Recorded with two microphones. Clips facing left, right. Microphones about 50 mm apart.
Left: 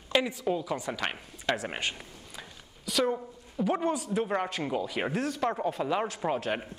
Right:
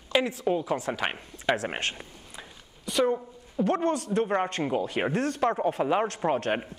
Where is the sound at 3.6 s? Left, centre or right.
Centre.